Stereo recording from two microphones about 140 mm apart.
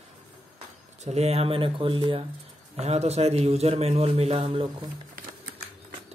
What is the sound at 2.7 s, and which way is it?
Speech, 50° right (ahead or behind).